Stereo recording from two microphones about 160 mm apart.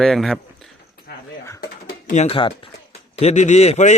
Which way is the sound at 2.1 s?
45° left (ahead or behind).